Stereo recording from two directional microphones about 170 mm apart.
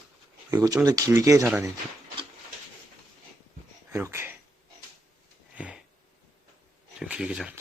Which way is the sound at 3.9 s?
15° right (ahead or behind).